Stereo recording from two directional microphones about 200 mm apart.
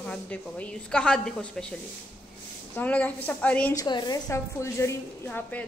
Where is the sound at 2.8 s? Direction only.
10° left (ahead or behind).